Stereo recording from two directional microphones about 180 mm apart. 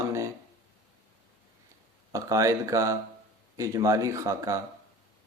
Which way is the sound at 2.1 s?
15° right (ahead or behind).